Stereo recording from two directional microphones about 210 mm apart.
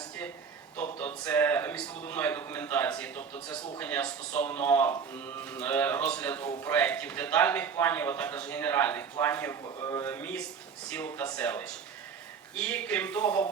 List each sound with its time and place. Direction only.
0.9 s a man's voice: 10° left (ahead or behind)